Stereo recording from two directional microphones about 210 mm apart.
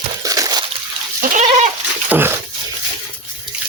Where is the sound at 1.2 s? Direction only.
35° right (ahead or behind).